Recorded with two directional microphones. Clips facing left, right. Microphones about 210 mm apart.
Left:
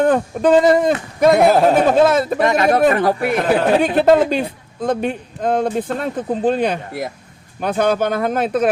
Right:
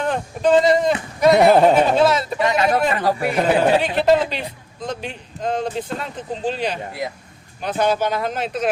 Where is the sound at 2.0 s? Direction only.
50° left (ahead or behind).